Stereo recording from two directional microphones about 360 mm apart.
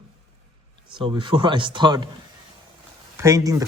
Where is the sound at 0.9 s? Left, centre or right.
Centre.